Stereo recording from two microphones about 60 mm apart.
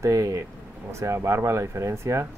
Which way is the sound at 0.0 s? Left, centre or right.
Right.